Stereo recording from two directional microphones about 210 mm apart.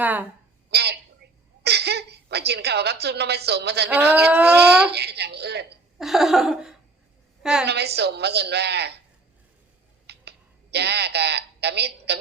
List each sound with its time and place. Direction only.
0.0 s speech: 10° right (ahead or behind)
0.7 s a woman's voice: 50° right (ahead or behind)
1.2 s laughter: 50° right (ahead or behind)
1.6 s a woman's voice: 50° right (ahead or behind)
3.8 s speech: 10° right (ahead or behind)
4.9 s speech: 50° right (ahead or behind)
6.0 s a sound: centre (ahead or behind)
7.6 s speech: 50° right (ahead or behind)
10.1 s a sound: 50° right (ahead or behind)